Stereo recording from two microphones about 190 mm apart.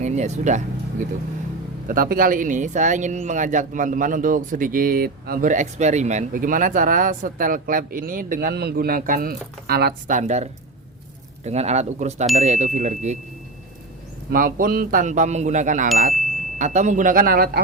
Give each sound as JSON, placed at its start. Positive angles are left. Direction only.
{"t": 0.0, "sound": "speech", "side_deg": -35}
{"t": 1.9, "sound": "speech", "side_deg": -50}
{"t": 14.3, "sound": "speech", "side_deg": -45}